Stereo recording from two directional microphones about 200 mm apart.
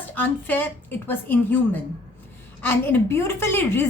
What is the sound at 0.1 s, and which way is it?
A woman's voice, 10° left (ahead or behind).